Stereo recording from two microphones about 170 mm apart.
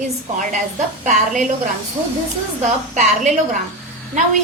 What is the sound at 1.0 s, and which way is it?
Speech, 50° right (ahead or behind).